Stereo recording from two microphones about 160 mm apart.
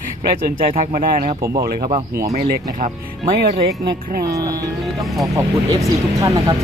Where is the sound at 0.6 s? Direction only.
50° right (ahead or behind).